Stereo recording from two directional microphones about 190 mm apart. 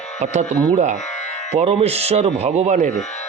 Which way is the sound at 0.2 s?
35° right (ahead or behind).